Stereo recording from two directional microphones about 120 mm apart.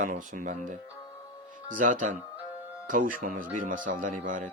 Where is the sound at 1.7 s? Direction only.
90° right.